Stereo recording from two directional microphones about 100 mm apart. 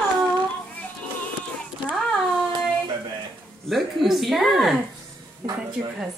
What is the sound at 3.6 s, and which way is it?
A woman's voice, centre (ahead or behind).